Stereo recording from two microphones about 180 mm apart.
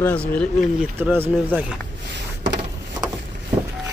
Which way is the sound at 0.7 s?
10° right (ahead or behind).